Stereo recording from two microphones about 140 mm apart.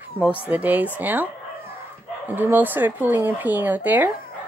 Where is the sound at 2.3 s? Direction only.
15° right (ahead or behind).